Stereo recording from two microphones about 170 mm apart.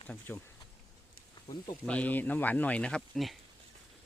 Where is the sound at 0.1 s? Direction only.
10° left (ahead or behind).